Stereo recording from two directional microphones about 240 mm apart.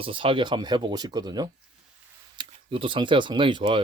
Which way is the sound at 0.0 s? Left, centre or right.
Right.